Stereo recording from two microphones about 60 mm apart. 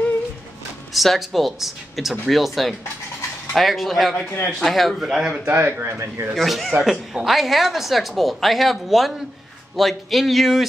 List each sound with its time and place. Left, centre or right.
0.9 s a woman's voice: centre
5.5 s speech: right
6.3 s a woman's voice: centre